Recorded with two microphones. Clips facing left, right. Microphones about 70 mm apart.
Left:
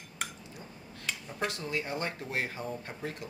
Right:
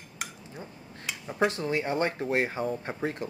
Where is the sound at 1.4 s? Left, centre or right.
Right.